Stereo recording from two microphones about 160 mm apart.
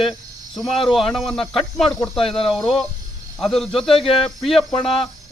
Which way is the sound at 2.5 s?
Centre (ahead or behind).